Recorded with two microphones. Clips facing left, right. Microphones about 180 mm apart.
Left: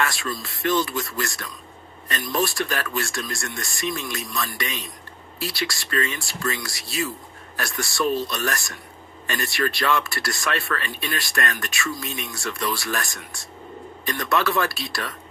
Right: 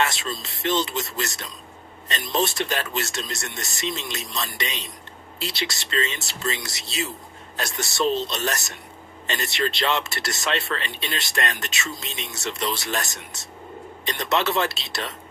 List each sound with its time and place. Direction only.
0.0 s speech: 20° right (ahead or behind)